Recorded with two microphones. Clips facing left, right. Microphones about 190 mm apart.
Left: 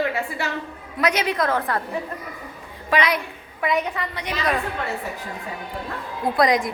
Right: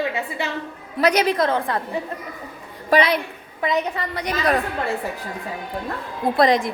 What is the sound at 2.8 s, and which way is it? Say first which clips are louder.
A woman's voice: right 4 dB; 35° right (ahead or behind).